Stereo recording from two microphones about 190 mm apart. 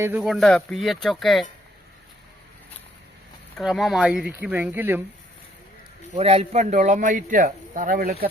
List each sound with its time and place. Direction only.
0.0 s speech: 10° right (ahead or behind)
3.6 s speech: centre (ahead or behind)
6.1 s speech: 30° right (ahead or behind); by 8.3 s 50° right (ahead or behind)